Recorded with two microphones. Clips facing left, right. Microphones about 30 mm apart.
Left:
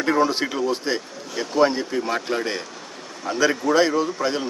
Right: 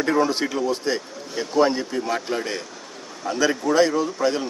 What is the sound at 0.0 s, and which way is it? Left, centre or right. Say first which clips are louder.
Speech: even; centre.